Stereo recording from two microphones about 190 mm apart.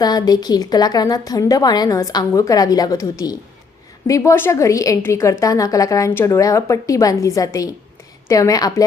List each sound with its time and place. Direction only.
0.0 s a woman's voice: 20° left (ahead or behind)